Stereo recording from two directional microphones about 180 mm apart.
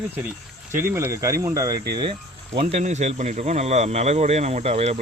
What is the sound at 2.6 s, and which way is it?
Speech, 35° right (ahead or behind).